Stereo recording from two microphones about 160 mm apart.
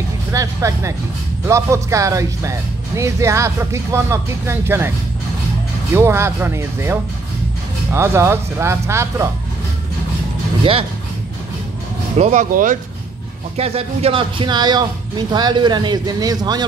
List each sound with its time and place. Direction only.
0.3 s speech: 20° right (ahead or behind)
5.9 s speech: 15° right (ahead or behind)
10.6 s speech: 35° right (ahead or behind)
12.2 s speech: 45° right (ahead or behind)
13.6 s speech: 40° right (ahead or behind); by 16.6 s 25° right (ahead or behind)